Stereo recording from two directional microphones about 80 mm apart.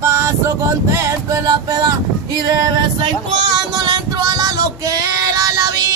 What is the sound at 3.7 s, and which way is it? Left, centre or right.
Male singing, right.